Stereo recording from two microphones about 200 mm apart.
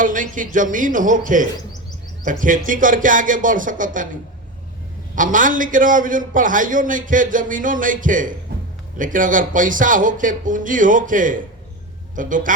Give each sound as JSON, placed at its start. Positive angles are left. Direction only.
{"t": 0.0, "sound": "a man's voice", "side_deg": -40}
{"t": 5.1, "sound": "a man's voice", "side_deg": -40}